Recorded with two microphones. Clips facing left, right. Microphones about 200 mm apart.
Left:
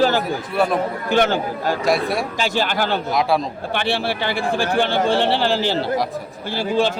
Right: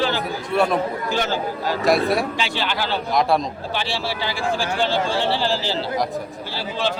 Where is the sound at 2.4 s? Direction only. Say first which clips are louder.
Left 4 dB; 45° left (ahead or behind).